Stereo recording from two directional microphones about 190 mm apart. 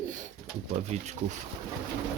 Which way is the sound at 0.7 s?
35° right (ahead or behind).